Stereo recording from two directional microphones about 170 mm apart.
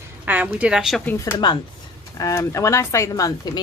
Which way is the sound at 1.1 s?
15° left (ahead or behind).